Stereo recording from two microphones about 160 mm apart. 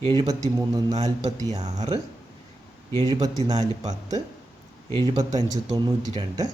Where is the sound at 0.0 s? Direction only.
30° right (ahead or behind).